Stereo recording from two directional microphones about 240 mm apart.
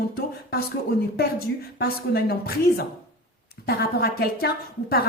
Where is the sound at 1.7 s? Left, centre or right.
Left.